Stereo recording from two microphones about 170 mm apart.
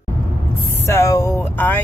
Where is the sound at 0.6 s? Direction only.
15° left (ahead or behind).